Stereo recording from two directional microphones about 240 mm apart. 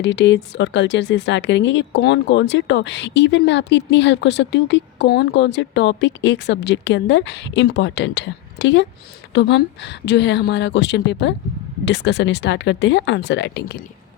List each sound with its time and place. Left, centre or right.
0.0 s speech: left